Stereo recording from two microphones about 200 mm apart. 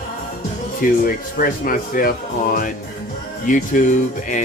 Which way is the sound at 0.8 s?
45° left (ahead or behind).